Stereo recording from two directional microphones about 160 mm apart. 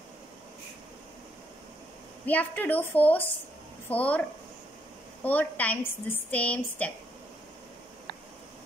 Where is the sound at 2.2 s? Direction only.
10° left (ahead or behind).